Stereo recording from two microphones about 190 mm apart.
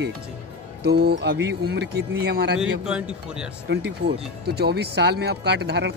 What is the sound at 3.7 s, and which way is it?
Speech, 60° right (ahead or behind).